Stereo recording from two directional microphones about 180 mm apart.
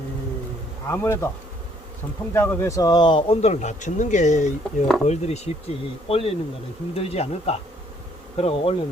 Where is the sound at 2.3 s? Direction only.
15° left (ahead or behind); by 8.7 s 35° left (ahead or behind).